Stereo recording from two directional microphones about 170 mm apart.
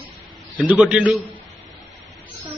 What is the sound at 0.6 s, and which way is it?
Speech, 5° right (ahead or behind).